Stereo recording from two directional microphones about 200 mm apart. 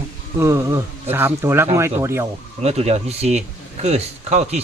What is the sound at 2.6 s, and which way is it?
Speech, 35° right (ahead or behind).